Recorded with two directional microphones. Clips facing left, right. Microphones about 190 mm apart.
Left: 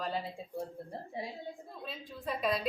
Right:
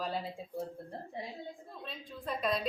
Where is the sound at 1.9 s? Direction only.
5° left (ahead or behind).